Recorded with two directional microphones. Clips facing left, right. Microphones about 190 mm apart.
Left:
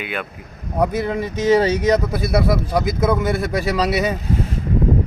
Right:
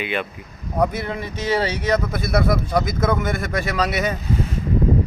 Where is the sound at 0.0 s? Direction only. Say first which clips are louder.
Right 2 dB; centre (ahead or behind).